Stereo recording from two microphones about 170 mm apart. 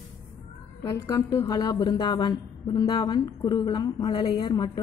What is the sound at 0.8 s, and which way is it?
A woman's voice, 15° left (ahead or behind).